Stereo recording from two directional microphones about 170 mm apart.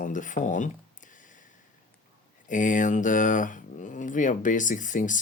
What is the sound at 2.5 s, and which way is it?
Speech, 50° left (ahead or behind).